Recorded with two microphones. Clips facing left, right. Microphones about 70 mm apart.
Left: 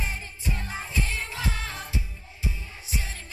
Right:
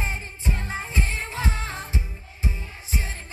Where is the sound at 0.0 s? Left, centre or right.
Right.